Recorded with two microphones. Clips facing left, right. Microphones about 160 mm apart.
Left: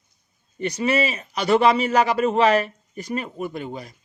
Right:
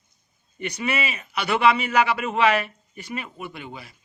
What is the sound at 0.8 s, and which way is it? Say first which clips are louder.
A man's voice: left 6 dB; 35° left (ahead or behind).